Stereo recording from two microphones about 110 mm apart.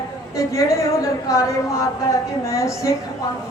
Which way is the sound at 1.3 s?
30° left (ahead or behind).